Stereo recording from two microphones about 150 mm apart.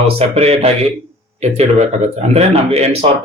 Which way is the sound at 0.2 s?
45° right (ahead or behind).